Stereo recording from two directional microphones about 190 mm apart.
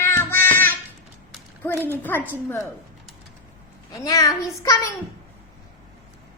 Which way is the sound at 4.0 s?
15° left (ahead or behind).